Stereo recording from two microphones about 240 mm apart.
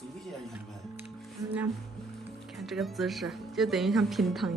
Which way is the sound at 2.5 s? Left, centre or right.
Centre.